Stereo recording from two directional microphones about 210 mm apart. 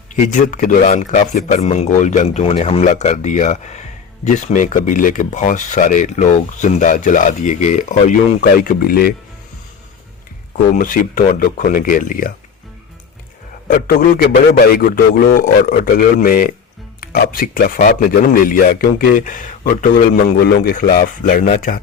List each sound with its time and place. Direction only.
0.3 s speech: 35° left (ahead or behind)
10.8 s speech: 40° left (ahead or behind)
13.7 s a man's voice: 45° left (ahead or behind)